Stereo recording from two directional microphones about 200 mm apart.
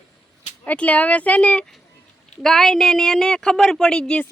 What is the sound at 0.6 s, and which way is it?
Speech, 10° left (ahead or behind).